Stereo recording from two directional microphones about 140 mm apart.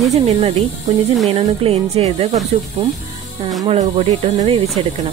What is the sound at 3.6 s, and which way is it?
Speech, 45° right (ahead or behind).